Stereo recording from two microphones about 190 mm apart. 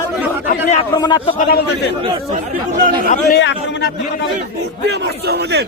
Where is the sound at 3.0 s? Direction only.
50° left (ahead or behind).